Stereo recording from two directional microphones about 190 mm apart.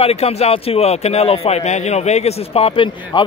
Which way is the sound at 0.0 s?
35° left (ahead or behind).